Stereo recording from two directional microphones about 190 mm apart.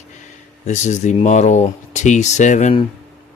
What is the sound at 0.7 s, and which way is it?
Speech, 40° left (ahead or behind).